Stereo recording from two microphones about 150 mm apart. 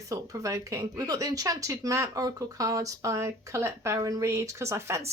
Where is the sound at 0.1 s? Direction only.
20° right (ahead or behind).